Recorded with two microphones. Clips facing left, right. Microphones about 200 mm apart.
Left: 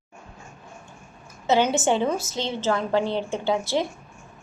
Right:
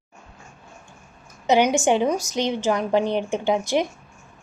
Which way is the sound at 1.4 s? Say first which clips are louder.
Right 2 dB; 15° right (ahead or behind).